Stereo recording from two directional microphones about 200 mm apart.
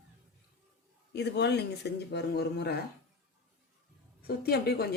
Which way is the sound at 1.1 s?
55° left (ahead or behind).